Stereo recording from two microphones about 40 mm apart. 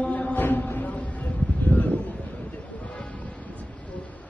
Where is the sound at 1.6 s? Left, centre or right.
Left.